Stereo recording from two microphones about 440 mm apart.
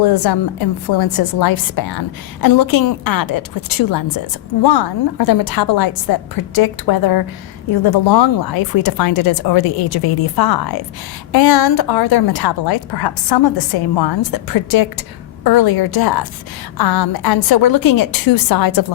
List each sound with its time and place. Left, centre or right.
0.0 s a woman's voice: left